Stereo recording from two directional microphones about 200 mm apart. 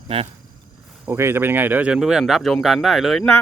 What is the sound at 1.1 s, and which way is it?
Speech, 10° right (ahead or behind).